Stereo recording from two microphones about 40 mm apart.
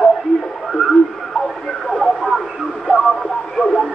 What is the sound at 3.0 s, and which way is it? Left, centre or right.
Radio, centre.